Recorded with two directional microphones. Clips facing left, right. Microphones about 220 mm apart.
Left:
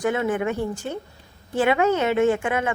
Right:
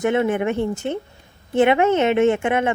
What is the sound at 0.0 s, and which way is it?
A woman's voice, 25° right (ahead or behind).